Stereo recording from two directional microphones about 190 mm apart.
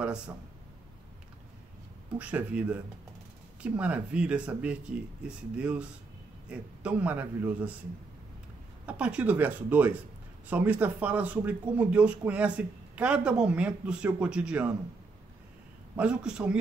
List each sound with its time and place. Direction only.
2.1 s a man's voice: 5° right (ahead or behind)
8.8 s a man's voice: 5° right (ahead or behind)
16.0 s a man's voice: 5° right (ahead or behind)